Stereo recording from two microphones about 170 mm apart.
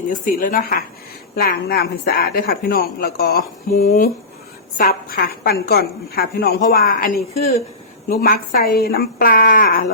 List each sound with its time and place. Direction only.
0.1 s speech: 50° left (ahead or behind)
8.1 s speech: 60° left (ahead or behind)